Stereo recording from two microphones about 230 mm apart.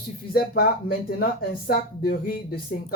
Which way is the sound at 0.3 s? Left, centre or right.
Left.